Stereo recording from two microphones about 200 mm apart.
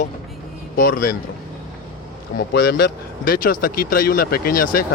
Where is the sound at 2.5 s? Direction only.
50° left (ahead or behind).